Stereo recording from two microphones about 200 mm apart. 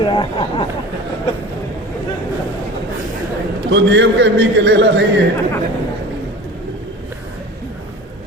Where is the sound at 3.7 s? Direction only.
65° right (ahead or behind).